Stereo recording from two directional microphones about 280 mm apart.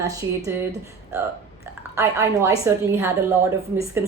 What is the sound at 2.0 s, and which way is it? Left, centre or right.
Speech, centre.